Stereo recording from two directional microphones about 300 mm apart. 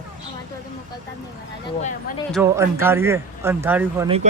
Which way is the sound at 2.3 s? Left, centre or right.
Centre.